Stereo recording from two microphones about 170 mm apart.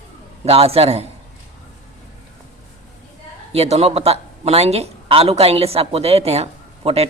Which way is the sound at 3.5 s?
40° right (ahead or behind).